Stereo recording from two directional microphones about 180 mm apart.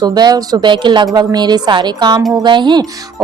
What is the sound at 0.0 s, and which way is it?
A woman's voice, 20° right (ahead or behind).